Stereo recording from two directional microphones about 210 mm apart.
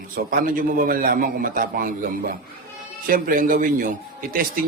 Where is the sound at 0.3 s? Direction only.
40° right (ahead or behind).